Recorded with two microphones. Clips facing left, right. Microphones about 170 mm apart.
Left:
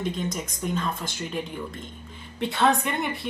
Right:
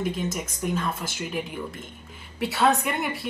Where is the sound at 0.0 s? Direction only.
10° right (ahead or behind).